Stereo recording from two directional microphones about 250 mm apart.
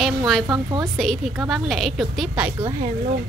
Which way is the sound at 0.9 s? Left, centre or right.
Centre.